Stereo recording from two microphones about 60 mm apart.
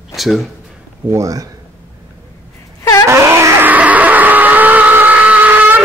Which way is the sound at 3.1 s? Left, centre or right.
Right.